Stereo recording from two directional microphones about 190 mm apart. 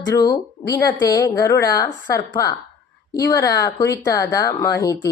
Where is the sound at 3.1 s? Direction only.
20° left (ahead or behind).